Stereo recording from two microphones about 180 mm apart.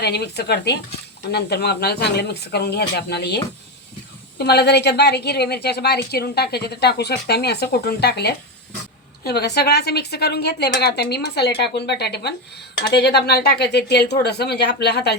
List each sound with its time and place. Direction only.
0.0 s a woman's voice: 65° left (ahead or behind)